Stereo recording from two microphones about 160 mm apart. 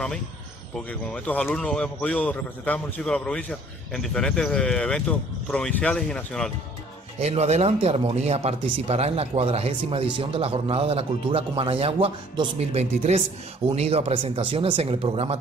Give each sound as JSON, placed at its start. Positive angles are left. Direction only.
{"t": 0.7, "sound": "speech", "side_deg": 5}
{"t": 7.2, "sound": "speech", "side_deg": -40}